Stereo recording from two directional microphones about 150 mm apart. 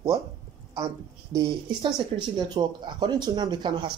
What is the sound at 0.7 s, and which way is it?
A man's voice, 20° right (ahead or behind).